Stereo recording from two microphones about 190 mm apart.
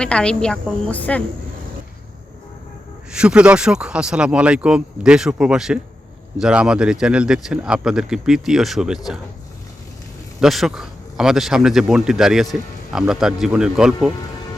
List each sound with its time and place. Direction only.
0.0 s speech: 5° left (ahead or behind)
3.1 s speech: 5° right (ahead or behind)
10.4 s speech: centre (ahead or behind)